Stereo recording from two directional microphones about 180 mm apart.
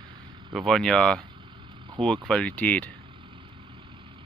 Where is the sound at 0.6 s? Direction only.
Centre (ahead or behind).